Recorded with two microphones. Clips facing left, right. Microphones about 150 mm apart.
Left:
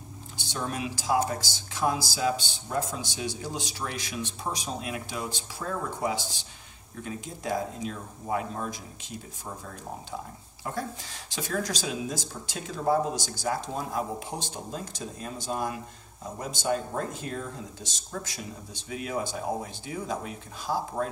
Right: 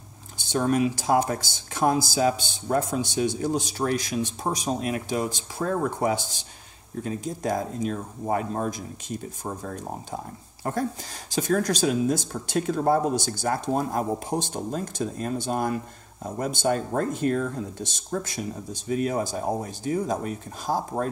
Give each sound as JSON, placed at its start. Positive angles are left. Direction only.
{"t": 0.5, "sound": "speech", "side_deg": -50}